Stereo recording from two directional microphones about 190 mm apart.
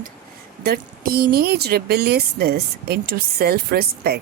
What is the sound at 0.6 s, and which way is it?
Speech, 55° right (ahead or behind).